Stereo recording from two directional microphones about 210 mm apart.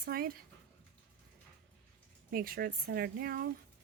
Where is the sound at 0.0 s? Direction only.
45° right (ahead or behind).